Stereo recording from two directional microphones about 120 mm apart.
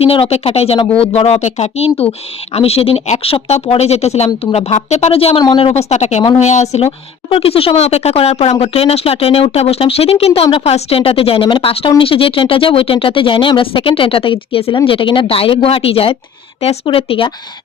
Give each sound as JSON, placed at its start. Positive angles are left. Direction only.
{"t": 0.0, "sound": "a woman's voice", "side_deg": 50}